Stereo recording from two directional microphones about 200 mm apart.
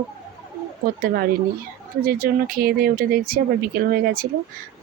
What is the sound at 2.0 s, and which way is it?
A woman's voice, 45° right (ahead or behind).